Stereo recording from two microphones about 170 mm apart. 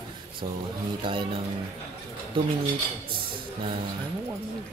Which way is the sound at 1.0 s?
30° right (ahead or behind).